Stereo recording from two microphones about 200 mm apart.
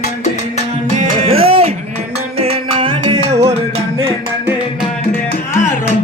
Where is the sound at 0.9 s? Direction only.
30° right (ahead or behind).